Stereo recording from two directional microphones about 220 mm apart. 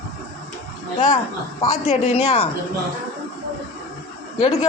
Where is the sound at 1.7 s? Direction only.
30° left (ahead or behind).